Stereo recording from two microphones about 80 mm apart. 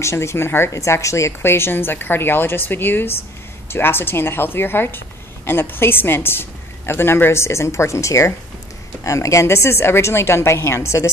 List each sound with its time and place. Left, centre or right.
0.0 s a woman's voice: left